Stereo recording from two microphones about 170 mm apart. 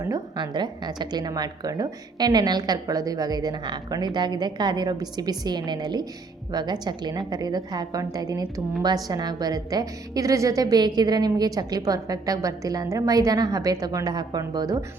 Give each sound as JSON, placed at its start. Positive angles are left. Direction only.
{"t": 0.0, "sound": "a woman's voice", "side_deg": -25}